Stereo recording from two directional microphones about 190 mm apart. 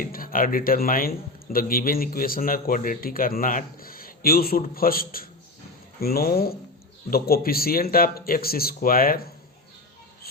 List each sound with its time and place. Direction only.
0.0 s a man's voice: 50° left (ahead or behind)